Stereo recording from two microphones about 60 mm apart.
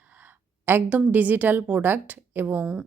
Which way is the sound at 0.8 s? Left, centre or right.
Right.